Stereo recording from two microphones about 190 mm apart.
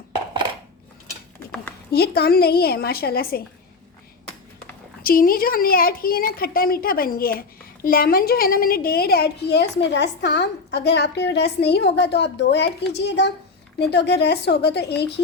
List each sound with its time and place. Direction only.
1.5 s a sound: 5° left (ahead or behind)
1.9 s a woman's voice: 55° left (ahead or behind)
5.0 s a woman's voice: 50° left (ahead or behind)